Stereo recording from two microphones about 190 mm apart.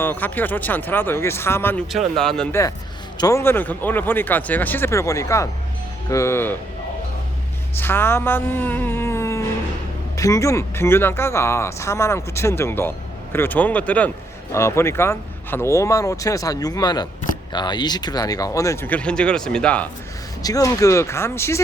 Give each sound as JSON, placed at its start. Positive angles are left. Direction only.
{"t": 0.0, "sound": "speech", "side_deg": 10}
{"t": 1.9, "sound": "speech", "side_deg": 0}
{"t": 3.2, "sound": "speech", "side_deg": 15}
{"t": 7.8, "sound": "speech", "side_deg": 10}
{"t": 20.4, "sound": "speech", "side_deg": 20}